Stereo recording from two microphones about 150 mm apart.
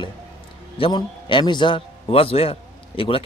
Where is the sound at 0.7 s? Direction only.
35° left (ahead or behind).